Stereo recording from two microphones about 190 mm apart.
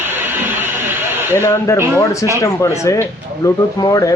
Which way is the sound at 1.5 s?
15° left (ahead or behind).